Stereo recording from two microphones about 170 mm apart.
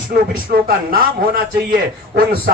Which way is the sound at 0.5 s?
60° right (ahead or behind).